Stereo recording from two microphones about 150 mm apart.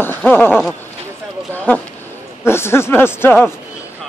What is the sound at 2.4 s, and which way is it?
Speech, 15° left (ahead or behind).